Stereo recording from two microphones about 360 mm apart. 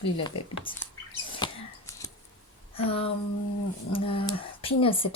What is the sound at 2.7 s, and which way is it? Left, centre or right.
Speech, centre.